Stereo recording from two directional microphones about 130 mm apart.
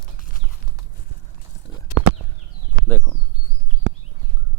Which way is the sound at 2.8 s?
15° left (ahead or behind).